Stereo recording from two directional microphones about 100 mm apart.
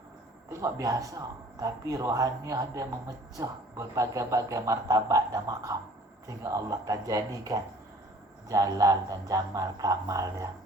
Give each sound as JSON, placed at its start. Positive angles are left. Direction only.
{"t": 0.5, "sound": "speech", "side_deg": -35}